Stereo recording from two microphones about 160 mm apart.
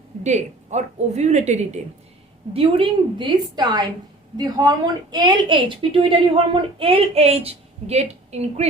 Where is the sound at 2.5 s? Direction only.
35° right (ahead or behind).